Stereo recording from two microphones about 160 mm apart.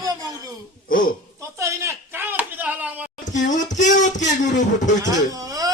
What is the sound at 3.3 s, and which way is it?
Speech, 50° left (ahead or behind).